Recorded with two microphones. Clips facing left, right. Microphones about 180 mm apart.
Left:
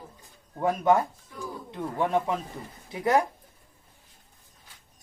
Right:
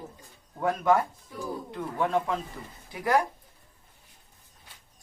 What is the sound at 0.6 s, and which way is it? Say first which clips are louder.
Speech: left 1 dB; 25° left (ahead or behind).